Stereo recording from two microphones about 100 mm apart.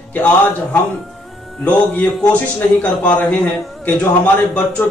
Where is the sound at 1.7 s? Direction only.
15° left (ahead or behind).